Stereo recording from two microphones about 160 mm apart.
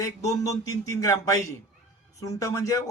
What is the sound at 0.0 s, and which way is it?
Speech, 20° left (ahead or behind).